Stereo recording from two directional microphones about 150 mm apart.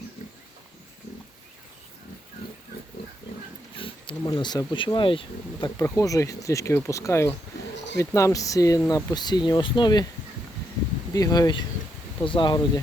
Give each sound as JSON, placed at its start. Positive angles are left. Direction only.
{"t": 3.8, "sound": "speech", "side_deg": 35}
{"t": 5.8, "sound": "speech", "side_deg": 20}
{"t": 11.1, "sound": "speech", "side_deg": 25}